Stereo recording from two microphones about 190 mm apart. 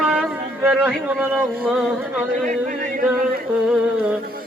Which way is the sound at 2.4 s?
45° right (ahead or behind).